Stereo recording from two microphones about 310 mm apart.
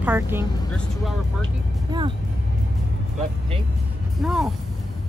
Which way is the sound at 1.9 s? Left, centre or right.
Centre.